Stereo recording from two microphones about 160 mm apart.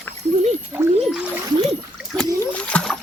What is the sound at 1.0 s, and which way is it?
Speech, 5° right (ahead or behind).